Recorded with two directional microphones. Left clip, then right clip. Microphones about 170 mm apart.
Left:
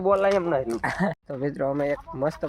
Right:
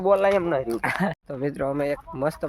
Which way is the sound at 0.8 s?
Centre (ahead or behind).